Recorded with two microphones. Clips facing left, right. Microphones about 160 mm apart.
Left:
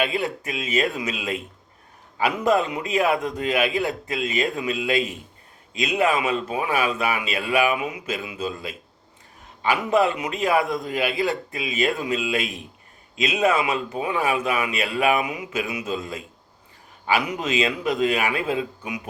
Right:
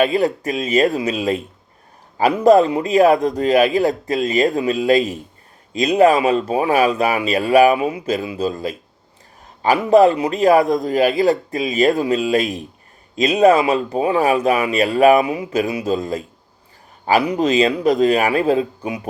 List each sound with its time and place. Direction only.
0.0 s speech: 40° right (ahead or behind)